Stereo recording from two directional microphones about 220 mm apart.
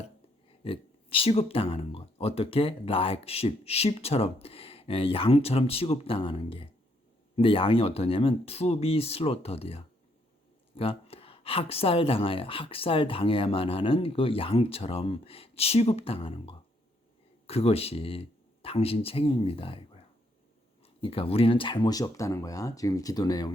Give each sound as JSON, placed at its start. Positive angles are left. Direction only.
{"t": 0.6, "sound": "speech", "side_deg": 25}